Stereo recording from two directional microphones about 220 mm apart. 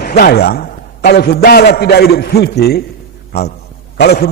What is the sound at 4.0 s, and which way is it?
Speech, 45° left (ahead or behind).